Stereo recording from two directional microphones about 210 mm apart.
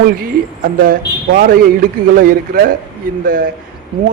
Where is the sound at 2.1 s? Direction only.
40° right (ahead or behind).